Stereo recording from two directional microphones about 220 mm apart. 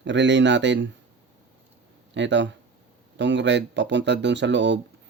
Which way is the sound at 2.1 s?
55° right (ahead or behind).